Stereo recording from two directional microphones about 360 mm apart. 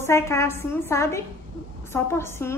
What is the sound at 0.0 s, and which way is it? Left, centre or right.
A woman's voice, centre.